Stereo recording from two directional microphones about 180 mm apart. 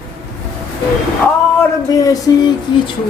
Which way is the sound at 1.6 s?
20° left (ahead or behind).